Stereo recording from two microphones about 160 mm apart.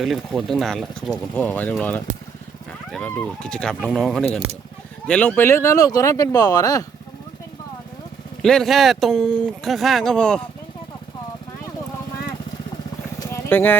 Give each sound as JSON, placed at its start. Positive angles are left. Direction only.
{"t": 0.0, "sound": "speech", "side_deg": 0}
{"t": 2.9, "sound": "speech", "side_deg": 5}
{"t": 8.4, "sound": "speech", "side_deg": 5}
{"t": 13.1, "sound": "a sound", "side_deg": 20}